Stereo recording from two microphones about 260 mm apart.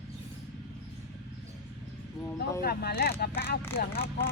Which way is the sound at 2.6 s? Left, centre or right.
Left.